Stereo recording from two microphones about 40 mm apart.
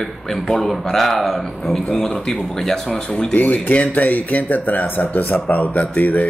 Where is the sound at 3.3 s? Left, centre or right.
Left.